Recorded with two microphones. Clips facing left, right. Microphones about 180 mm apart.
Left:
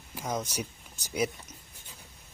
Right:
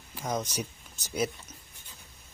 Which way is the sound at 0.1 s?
10° left (ahead or behind).